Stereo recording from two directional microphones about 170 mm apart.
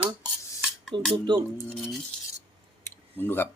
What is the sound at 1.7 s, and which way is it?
Cutlery, centre (ahead or behind).